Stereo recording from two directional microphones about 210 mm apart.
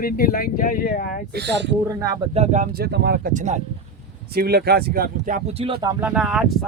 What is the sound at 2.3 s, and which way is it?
Speech, 30° right (ahead or behind).